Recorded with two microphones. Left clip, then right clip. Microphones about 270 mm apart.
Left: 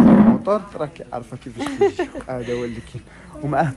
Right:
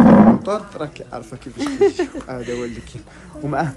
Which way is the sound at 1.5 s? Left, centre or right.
Centre.